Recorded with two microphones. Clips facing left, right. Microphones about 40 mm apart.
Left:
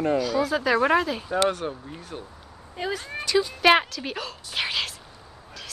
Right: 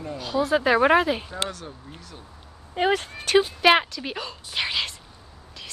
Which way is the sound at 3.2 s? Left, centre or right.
Right.